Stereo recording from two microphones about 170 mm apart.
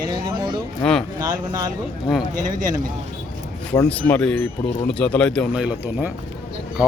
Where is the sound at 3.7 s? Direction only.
10° left (ahead or behind); by 6.1 s 5° right (ahead or behind).